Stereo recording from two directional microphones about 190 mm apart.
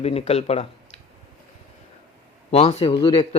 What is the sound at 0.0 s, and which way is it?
Speech, 35° left (ahead or behind).